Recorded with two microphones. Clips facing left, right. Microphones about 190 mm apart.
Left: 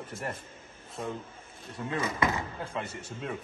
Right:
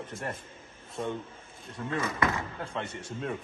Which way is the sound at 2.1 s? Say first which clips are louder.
Even; 20° left (ahead or behind).